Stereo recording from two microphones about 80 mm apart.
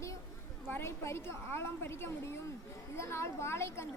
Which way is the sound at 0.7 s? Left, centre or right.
Left.